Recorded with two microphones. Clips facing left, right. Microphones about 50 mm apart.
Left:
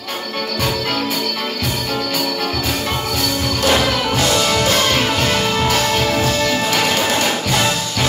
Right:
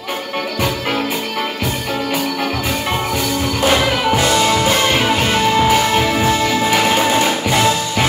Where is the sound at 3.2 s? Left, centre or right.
Centre.